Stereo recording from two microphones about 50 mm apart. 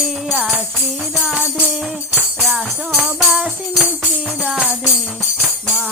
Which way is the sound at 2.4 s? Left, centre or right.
Centre.